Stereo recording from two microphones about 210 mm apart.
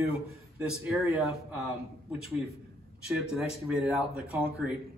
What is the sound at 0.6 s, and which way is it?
A man's voice, 5° right (ahead or behind).